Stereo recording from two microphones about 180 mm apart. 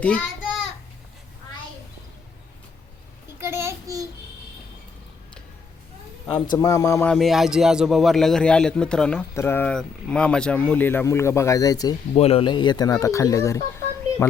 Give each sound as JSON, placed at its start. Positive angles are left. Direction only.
{"t": 3.4, "sound": "child singing", "side_deg": -15}
{"t": 6.2, "sound": "speech", "side_deg": 25}
{"t": 7.1, "sound": "a man's voice", "side_deg": 0}
{"t": 12.1, "sound": "speech", "side_deg": 35}